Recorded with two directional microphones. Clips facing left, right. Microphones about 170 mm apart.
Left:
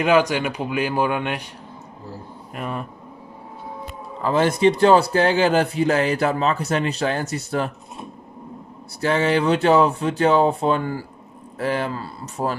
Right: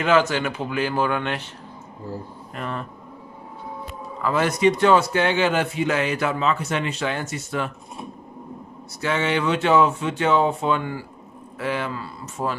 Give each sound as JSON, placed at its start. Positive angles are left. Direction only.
{"t": 0.0, "sound": "speech", "side_deg": 15}
{"t": 2.5, "sound": "speech", "side_deg": 10}
{"t": 4.2, "sound": "a man's voice", "side_deg": 30}
{"t": 9.0, "sound": "a man's voice", "side_deg": 35}